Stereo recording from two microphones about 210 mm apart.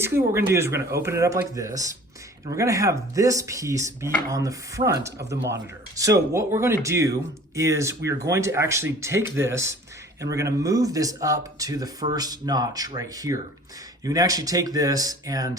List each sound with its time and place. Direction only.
0.3 s speech: 10° right (ahead or behind)
5.3 s speech: 55° right (ahead or behind)
6.0 s speech: 15° right (ahead or behind)